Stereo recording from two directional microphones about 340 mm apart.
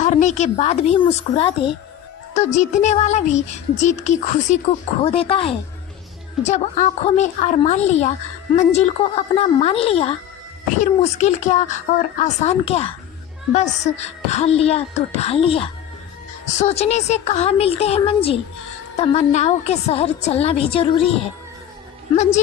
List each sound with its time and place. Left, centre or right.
0.0 s a woman's voice: left